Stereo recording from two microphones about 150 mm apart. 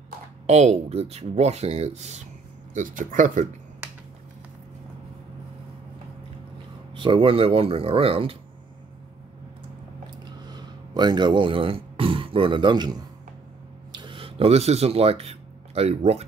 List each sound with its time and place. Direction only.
0.5 s speech: 45° right (ahead or behind)
2.7 s speech: 60° right (ahead or behind)
7.0 s speech: 35° right (ahead or behind)
10.2 s speech: 30° right (ahead or behind); by 16.3 s 45° right (ahead or behind)